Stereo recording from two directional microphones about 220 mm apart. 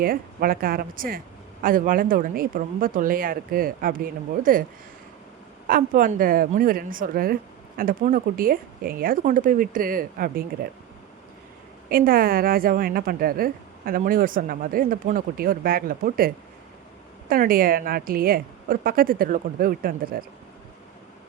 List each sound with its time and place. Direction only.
0.0 s a woman's voice: 40° right (ahead or behind)
5.6 s a woman's voice: 40° right (ahead or behind)
11.9 s a woman's voice: 40° right (ahead or behind)